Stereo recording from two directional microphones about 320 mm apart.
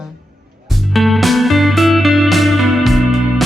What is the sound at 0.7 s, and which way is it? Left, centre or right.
Music, centre.